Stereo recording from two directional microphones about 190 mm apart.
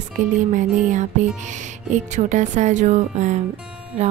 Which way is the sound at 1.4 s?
40° right (ahead or behind).